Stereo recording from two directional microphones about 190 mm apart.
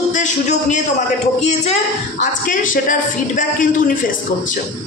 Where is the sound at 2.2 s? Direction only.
45° left (ahead or behind).